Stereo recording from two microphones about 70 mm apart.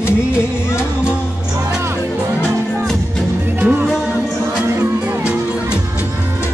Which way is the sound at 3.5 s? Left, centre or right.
Right.